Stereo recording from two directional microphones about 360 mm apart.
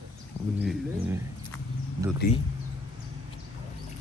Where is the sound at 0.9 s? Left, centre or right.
Centre.